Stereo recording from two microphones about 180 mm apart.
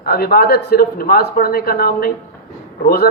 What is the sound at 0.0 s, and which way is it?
A woman's voice, 60° left (ahead or behind).